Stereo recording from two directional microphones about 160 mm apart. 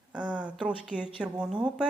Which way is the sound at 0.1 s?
5° right (ahead or behind).